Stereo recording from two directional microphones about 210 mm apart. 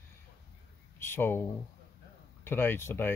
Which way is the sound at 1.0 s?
10° left (ahead or behind).